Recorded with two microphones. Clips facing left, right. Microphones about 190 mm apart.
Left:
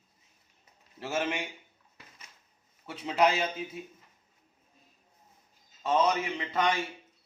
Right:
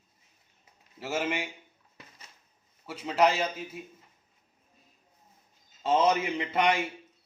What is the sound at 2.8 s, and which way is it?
A man's voice, centre (ahead or behind).